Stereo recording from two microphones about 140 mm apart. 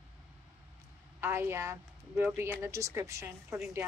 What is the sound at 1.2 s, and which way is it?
Speech, 15° right (ahead or behind).